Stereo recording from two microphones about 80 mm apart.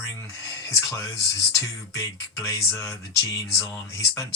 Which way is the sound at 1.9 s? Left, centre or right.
Left.